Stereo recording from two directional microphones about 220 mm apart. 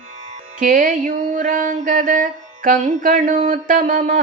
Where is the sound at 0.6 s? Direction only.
35° right (ahead or behind).